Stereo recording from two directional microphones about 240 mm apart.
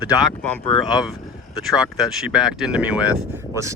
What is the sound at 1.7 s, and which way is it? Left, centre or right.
Speech, centre.